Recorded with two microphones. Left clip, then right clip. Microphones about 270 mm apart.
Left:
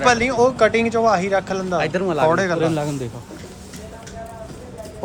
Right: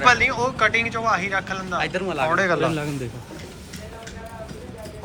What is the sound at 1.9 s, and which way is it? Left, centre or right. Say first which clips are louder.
Speech: left 4 dB; left.